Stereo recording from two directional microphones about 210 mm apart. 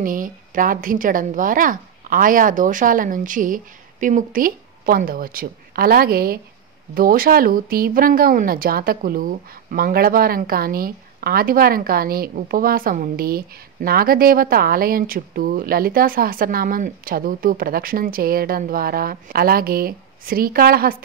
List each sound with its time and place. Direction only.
0.0 s a woman's voice: 40° right (ahead or behind)